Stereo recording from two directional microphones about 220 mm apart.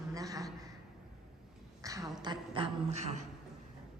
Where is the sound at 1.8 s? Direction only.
15° right (ahead or behind).